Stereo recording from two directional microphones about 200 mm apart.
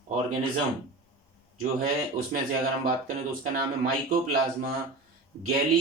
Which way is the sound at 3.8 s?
45° right (ahead or behind).